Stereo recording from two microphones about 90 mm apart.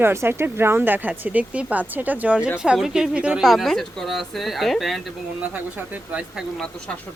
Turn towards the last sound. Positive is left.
turn(degrees=-15)  # may be behind; listen again after turning